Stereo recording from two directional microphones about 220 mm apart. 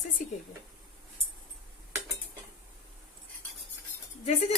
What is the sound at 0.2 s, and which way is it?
Speech, 35° left (ahead or behind).